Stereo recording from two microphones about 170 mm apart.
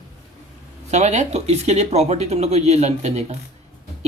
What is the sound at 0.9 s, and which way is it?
Speech, 40° right (ahead or behind).